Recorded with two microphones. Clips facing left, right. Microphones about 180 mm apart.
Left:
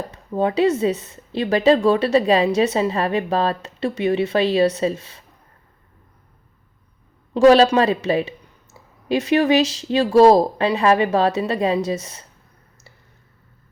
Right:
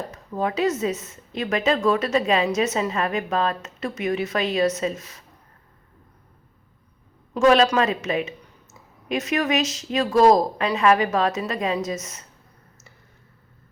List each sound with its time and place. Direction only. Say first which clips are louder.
0.1 s speech: left 8 dB; 30° left (ahead or behind)
7.3 s speech: left 5 dB; 35° left (ahead or behind)